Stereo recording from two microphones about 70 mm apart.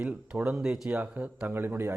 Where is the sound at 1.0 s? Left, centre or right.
Right.